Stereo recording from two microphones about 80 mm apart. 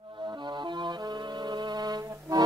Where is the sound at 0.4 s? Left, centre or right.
Right.